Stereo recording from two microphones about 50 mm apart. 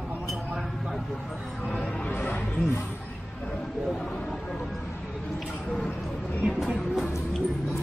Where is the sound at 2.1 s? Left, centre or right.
Left.